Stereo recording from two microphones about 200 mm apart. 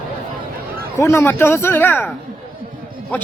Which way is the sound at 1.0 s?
15° left (ahead or behind).